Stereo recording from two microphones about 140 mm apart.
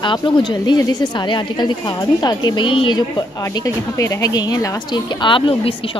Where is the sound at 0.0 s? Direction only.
35° left (ahead or behind).